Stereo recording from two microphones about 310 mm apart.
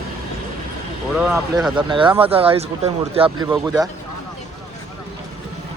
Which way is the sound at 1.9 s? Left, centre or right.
Centre.